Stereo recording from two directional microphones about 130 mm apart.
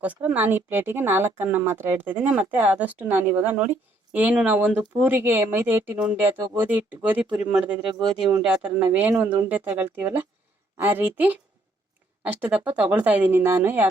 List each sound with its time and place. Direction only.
0.0 s speech: 10° right (ahead or behind)